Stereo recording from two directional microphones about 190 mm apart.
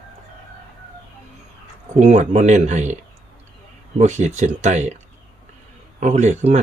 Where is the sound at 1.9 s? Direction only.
40° right (ahead or behind).